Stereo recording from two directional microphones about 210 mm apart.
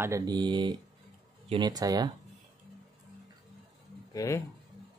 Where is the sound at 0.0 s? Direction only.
15° right (ahead or behind).